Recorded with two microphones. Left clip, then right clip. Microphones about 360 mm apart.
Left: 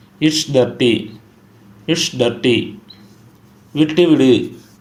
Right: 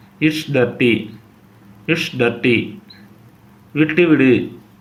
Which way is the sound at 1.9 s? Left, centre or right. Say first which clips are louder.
Left 1 dB; centre.